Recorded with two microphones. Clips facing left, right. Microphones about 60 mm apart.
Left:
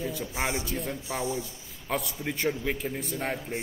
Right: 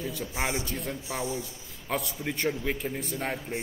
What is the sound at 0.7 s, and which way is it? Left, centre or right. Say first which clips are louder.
A man's voice: left 1 dB; centre.